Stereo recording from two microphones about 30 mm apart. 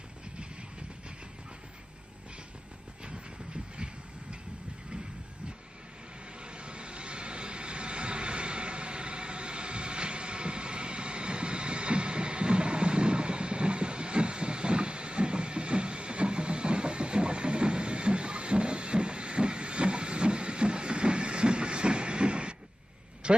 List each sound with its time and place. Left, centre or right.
3.7 s vehicle: right
6.4 s vehicle: right
23.2 s a sound: right